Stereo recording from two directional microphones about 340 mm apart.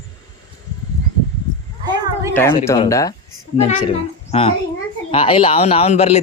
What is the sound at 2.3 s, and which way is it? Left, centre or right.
A woman's voice, centre.